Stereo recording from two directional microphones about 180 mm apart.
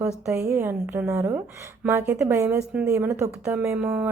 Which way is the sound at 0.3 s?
15° right (ahead or behind).